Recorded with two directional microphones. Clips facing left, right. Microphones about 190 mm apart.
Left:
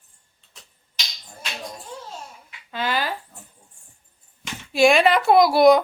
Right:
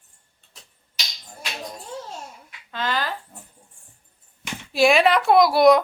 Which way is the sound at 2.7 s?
10° left (ahead or behind).